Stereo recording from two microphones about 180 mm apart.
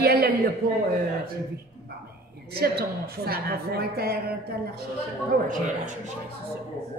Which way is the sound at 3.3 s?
60° right (ahead or behind).